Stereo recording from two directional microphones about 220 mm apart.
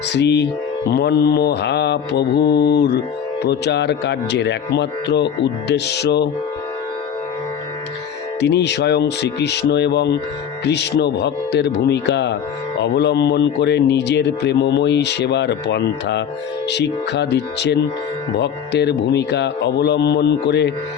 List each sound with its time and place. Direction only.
0.1 s a man's voice: 50° left (ahead or behind)
8.4 s a man's voice: 50° left (ahead or behind)